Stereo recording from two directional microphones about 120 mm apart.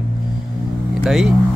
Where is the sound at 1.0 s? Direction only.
Centre (ahead or behind).